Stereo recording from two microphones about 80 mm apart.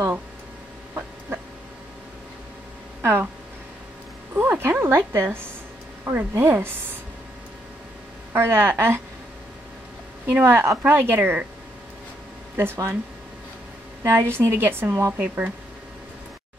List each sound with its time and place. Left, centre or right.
3.0 s speech: right
4.4 s a woman's voice: right
8.3 s a woman's voice: right
10.4 s a woman's voice: right
12.5 s a woman's voice: right
14.0 s a woman's voice: right
15.1 s a woman's voice: centre